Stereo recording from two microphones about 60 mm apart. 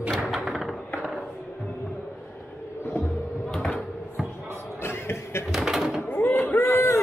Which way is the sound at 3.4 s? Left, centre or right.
Centre.